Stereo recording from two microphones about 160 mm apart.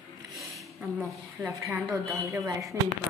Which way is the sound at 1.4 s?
15° right (ahead or behind).